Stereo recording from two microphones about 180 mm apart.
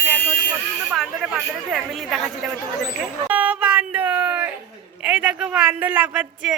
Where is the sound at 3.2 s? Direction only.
10° right (ahead or behind).